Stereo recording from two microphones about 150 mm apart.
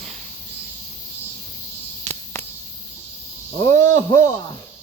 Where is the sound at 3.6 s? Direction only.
20° left (ahead or behind).